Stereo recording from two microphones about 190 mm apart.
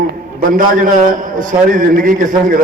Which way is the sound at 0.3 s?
45° right (ahead or behind).